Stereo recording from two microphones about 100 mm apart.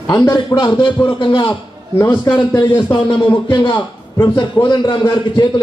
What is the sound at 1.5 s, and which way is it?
A man's voice, 25° left (ahead or behind).